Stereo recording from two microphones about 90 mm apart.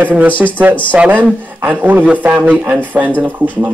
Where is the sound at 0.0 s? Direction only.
15° right (ahead or behind).